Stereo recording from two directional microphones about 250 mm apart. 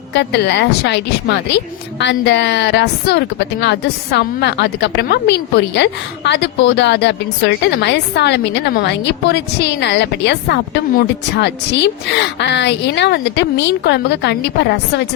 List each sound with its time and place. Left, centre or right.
0.1 s a woman's voice: left